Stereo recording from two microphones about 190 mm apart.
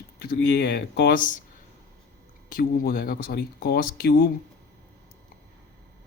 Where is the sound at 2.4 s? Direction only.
50° left (ahead or behind).